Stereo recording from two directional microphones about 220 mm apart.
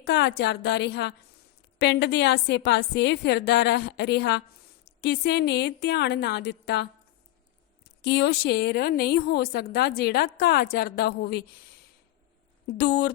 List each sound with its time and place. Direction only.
0.0 s a woman's voice: 50° left (ahead or behind)
8.0 s a woman's voice: 50° left (ahead or behind)
12.7 s a woman's voice: 50° left (ahead or behind)